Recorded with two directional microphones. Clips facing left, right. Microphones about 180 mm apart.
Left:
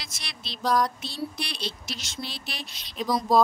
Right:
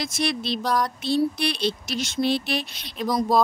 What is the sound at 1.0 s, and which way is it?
Speech, 65° right (ahead or behind).